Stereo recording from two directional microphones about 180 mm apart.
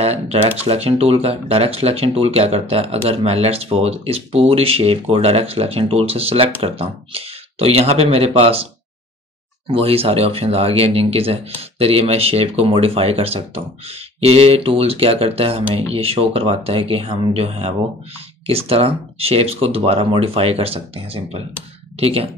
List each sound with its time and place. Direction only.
0.0 s speech: 35° right (ahead or behind)
9.7 s speech: 35° right (ahead or behind)